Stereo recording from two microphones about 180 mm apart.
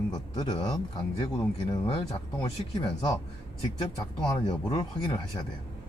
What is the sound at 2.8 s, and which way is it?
Speech, 20° left (ahead or behind).